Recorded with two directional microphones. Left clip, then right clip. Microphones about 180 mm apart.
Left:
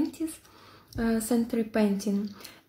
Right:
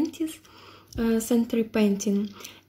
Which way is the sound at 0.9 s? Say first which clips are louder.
Right 3 dB; 35° right (ahead or behind).